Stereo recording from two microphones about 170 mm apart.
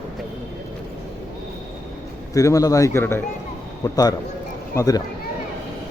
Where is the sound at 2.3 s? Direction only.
20° left (ahead or behind).